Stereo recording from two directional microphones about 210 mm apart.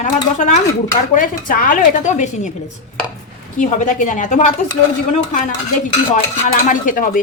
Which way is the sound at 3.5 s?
40° left (ahead or behind).